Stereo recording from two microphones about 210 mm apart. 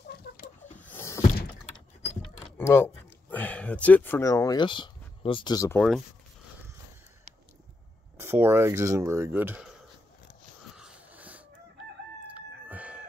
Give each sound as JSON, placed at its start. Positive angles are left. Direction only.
{"t": 0.3, "sound": "a sound", "side_deg": 45}
{"t": 0.7, "sound": "a sound", "side_deg": 10}
{"t": 2.5, "sound": "speech", "side_deg": 10}
{"t": 5.8, "sound": "speech", "side_deg": 0}
{"t": 8.2, "sound": "speech", "side_deg": -10}
{"t": 10.8, "sound": "wheeze", "side_deg": -5}
{"t": 12.4, "sound": "chicken", "side_deg": -5}